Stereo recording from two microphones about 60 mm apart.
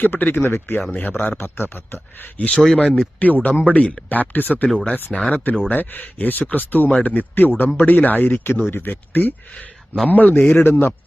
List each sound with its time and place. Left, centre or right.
0.0 s speech: left
2.4 s speech: centre; by 10.5 s left
10.5 s speech: left